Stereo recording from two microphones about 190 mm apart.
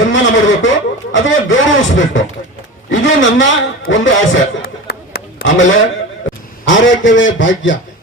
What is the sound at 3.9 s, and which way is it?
Speech, 80° left.